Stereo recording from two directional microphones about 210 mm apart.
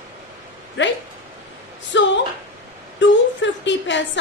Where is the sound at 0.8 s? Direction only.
60° left (ahead or behind).